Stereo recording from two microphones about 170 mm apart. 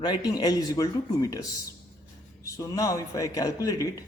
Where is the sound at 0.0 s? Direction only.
25° left (ahead or behind).